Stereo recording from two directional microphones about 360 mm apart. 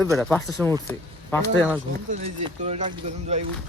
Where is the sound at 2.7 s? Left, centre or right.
Centre.